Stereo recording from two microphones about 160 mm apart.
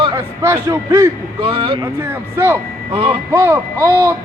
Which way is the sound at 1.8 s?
15° right (ahead or behind).